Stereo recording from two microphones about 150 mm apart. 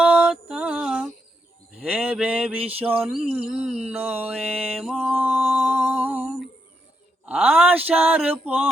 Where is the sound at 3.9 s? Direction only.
15° right (ahead or behind).